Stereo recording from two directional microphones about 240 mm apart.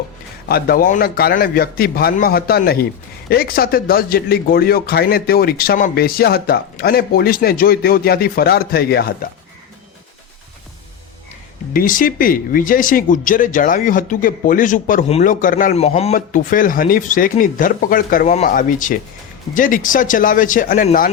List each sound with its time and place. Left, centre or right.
0.4 s speech: left
11.7 s speech: left